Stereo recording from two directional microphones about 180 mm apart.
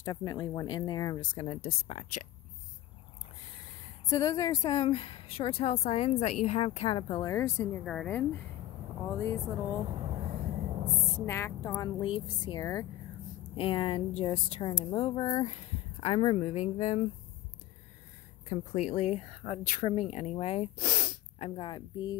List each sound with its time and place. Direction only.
0.0 s speech: 25° left (ahead or behind)
4.1 s speech: 20° left (ahead or behind)
7.3 s speech: 15° left (ahead or behind)
9.8 s a sound: 30° right (ahead or behind)
11.2 s speech: 15° left (ahead or behind)
13.6 s a woman's voice: 30° left (ahead or behind)
18.8 s speech: 40° left (ahead or behind)
21.5 s speech: 25° left (ahead or behind)